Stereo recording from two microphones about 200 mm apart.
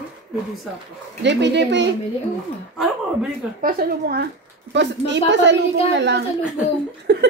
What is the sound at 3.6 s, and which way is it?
Speech, 50° right (ahead or behind).